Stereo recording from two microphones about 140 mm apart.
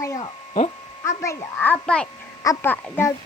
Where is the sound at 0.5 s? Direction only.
45° left (ahead or behind).